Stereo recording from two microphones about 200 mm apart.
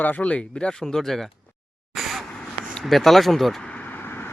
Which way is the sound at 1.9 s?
Centre (ahead or behind).